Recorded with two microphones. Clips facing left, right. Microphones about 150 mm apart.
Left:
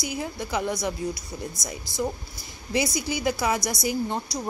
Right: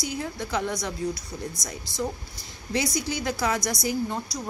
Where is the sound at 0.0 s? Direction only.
10° left (ahead or behind).